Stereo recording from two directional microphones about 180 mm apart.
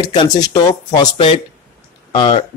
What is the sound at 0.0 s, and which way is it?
Speech, 25° left (ahead or behind).